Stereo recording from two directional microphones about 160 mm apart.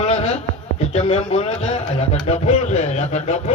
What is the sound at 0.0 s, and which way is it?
Speech, 40° left (ahead or behind).